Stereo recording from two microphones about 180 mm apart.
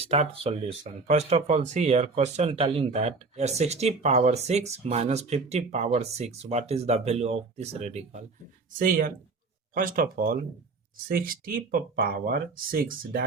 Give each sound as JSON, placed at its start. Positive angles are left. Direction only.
{"t": 0.0, "sound": "speech", "side_deg": -35}
{"t": 8.8, "sound": "speech", "side_deg": -50}